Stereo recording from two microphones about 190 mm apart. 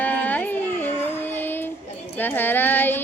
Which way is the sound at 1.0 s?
10° left (ahead or behind).